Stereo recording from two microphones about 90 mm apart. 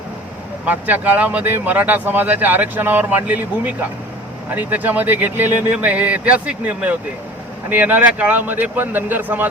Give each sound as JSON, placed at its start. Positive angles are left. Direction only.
{"t": 0.6, "sound": "speech", "side_deg": -20}